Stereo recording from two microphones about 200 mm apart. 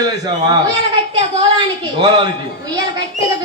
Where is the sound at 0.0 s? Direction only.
20° right (ahead or behind).